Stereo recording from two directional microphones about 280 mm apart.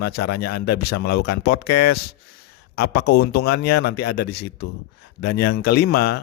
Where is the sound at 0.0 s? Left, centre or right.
Left.